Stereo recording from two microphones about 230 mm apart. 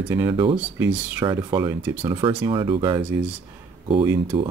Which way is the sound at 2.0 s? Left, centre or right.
Right.